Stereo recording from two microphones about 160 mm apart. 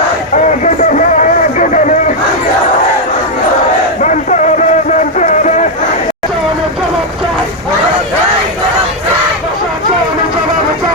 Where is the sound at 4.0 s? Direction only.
50° left (ahead or behind).